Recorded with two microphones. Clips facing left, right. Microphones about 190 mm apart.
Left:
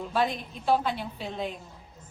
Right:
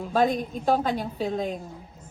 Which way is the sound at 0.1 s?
45° right (ahead or behind).